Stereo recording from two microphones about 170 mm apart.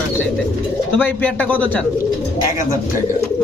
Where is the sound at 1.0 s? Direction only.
10° left (ahead or behind).